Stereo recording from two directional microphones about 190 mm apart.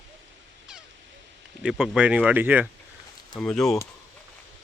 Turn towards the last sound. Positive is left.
turn(degrees=5)  # may be behind; listen again after turning